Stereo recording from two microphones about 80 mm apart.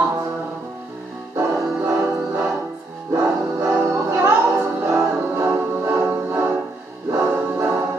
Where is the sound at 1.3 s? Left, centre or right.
Right.